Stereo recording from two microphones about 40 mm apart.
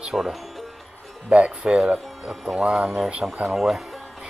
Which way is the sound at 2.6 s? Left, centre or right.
Right.